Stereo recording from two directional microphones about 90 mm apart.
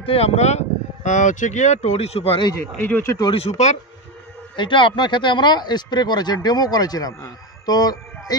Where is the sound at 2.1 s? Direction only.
90° left.